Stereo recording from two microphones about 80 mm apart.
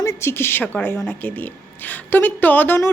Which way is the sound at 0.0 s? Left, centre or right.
Left.